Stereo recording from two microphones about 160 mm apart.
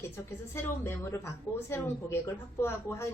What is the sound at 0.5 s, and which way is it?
A woman's voice, 15° left (ahead or behind).